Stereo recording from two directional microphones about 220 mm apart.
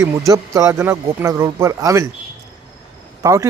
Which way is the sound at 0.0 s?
15° right (ahead or behind).